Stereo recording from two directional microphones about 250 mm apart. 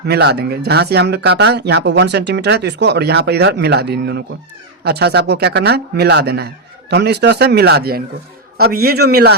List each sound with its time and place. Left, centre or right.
0.1 s speech: right